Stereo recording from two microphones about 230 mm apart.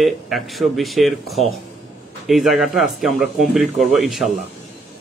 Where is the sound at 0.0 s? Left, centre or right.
Centre.